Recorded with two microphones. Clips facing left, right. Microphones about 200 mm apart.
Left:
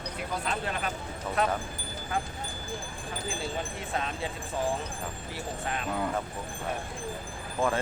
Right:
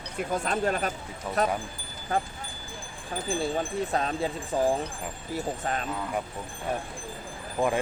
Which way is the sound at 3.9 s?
40° right (ahead or behind).